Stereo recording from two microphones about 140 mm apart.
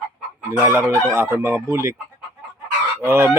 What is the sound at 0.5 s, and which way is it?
Speech, 15° right (ahead or behind).